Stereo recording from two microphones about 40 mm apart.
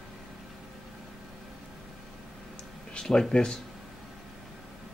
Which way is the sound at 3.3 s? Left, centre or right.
Centre.